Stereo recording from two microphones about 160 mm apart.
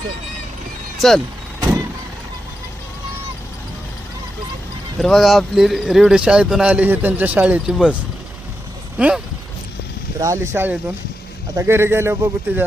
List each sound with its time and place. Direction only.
0.9 s speech: centre (ahead or behind)
4.9 s speech: centre (ahead or behind)
9.0 s speech: 5° right (ahead or behind)
10.2 s speech: 20° right (ahead or behind)